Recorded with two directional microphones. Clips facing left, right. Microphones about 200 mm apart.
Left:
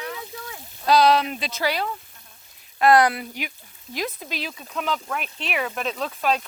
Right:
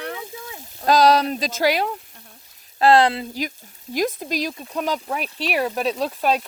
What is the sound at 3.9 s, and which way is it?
Speech, 45° right (ahead or behind).